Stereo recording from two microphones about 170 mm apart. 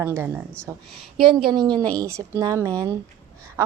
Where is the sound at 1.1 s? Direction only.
30° right (ahead or behind).